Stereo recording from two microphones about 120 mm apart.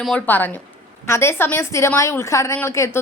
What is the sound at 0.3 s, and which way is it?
A woman's voice, 15° left (ahead or behind).